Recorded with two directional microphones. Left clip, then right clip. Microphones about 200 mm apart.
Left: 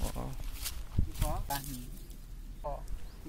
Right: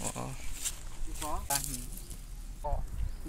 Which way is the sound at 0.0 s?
Centre (ahead or behind).